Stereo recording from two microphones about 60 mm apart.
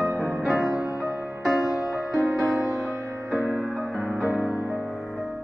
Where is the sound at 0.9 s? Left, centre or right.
Right.